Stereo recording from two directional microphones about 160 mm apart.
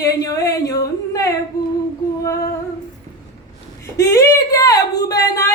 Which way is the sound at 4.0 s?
20° left (ahead or behind).